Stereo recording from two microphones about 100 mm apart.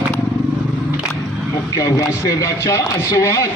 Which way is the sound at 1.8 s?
35° left (ahead or behind).